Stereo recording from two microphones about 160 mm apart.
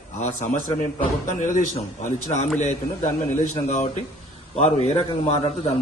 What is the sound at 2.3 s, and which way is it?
Speech, 30° left (ahead or behind).